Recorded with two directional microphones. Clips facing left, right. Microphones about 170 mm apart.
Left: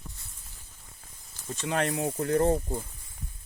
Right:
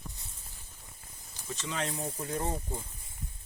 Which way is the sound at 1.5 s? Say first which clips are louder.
Left 7 dB; 55° left (ahead or behind).